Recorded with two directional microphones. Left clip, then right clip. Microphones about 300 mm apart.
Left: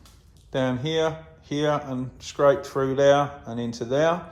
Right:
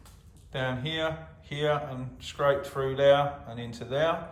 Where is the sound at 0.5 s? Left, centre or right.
Centre.